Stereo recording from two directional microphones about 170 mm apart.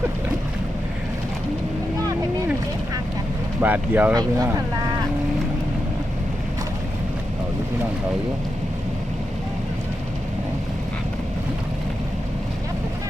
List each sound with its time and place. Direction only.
3.6 s speech: 10° right (ahead or behind)
4.1 s speech: 20° right (ahead or behind)